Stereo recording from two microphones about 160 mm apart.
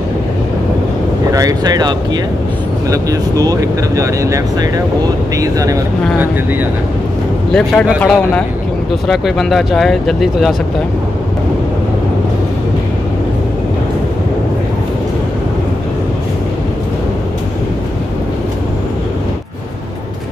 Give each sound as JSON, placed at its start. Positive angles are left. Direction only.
{"t": 1.3, "sound": "speech", "side_deg": -20}
{"t": 7.5, "sound": "speech", "side_deg": 10}